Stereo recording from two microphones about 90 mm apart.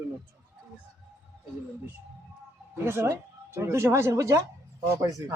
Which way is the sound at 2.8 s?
30° right (ahead or behind).